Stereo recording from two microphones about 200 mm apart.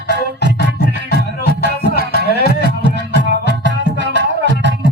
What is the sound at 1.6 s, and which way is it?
Music, 50° left (ahead or behind).